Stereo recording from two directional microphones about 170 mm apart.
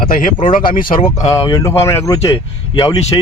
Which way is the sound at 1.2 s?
20° left (ahead or behind).